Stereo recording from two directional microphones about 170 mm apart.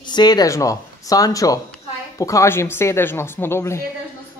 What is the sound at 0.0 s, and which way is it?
Speech, 25° left (ahead or behind).